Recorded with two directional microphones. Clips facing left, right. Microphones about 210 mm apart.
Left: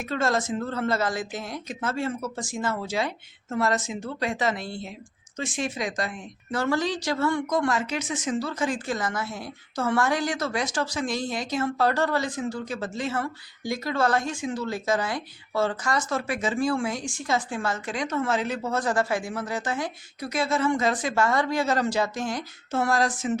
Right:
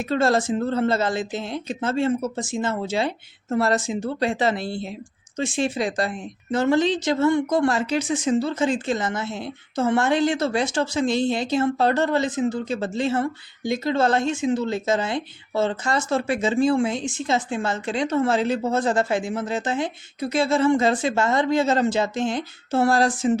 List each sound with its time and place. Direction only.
0.0 s a woman's voice: 30° right (ahead or behind)